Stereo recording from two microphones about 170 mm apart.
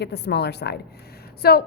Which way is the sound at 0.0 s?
80° left.